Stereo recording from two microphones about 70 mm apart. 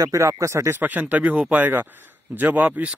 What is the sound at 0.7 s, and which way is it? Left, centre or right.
Speech, right.